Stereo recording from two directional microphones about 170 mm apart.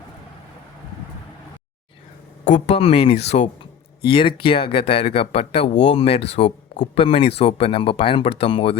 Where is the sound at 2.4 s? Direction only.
40° left (ahead or behind).